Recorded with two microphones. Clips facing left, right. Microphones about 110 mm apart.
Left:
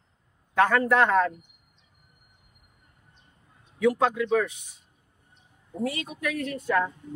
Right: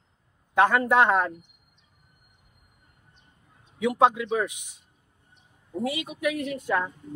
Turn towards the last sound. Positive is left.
turn(degrees=-15)  # may be behind; listen again after turning